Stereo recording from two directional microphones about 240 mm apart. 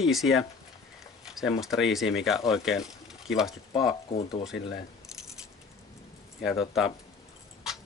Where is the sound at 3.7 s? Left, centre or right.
Centre.